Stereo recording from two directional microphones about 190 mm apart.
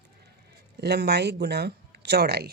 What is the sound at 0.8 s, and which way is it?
Speech, 60° right (ahead or behind).